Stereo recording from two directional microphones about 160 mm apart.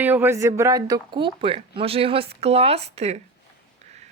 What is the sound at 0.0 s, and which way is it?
Speech, 10° right (ahead or behind).